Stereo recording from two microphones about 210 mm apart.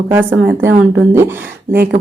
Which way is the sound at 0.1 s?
10° right (ahead or behind).